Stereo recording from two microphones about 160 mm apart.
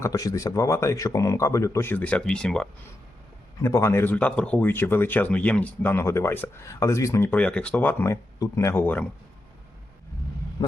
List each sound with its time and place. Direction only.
0.0 s speech: 20° left (ahead or behind); by 2.6 s 5° left (ahead or behind)
3.6 s speech: 15° left (ahead or behind)